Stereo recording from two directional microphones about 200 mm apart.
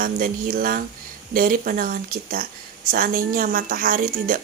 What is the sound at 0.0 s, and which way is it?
Speech, 45° right (ahead or behind).